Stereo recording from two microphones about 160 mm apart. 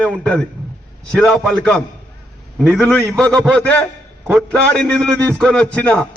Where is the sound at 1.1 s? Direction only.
Centre (ahead or behind).